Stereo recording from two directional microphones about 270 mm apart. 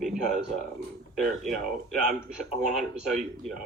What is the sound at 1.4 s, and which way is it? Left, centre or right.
A man's voice, centre.